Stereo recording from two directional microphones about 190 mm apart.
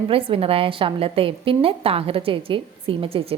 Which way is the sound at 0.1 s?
30° right (ahead or behind).